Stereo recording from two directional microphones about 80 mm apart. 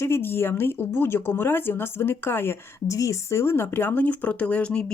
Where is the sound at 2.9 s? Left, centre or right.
Left.